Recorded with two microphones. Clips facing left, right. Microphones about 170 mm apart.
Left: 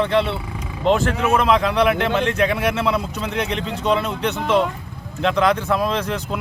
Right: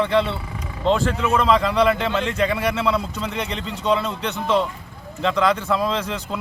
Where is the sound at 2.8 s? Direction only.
20° left (ahead or behind).